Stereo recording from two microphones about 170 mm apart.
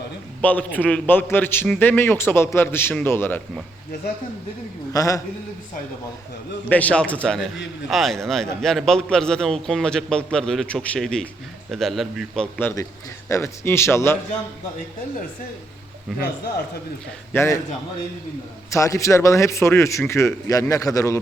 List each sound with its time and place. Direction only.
0.4 s a man's voice: 10° left (ahead or behind)
4.9 s a man's voice: 20° left (ahead or behind)
6.7 s a man's voice: 10° left (ahead or behind)
12.5 s a man's voice: 10° left (ahead or behind)
17.3 s a man's voice: 15° left (ahead or behind)
18.7 s a man's voice: 20° left (ahead or behind)